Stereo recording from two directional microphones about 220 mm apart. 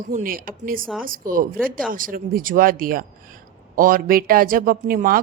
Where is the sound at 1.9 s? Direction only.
40° right (ahead or behind).